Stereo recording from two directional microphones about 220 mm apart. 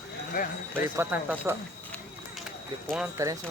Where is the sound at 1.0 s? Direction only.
10° right (ahead or behind).